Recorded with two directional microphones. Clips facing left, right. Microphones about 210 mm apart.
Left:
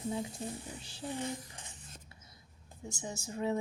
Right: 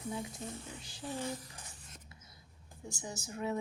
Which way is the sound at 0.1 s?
30° left (ahead or behind).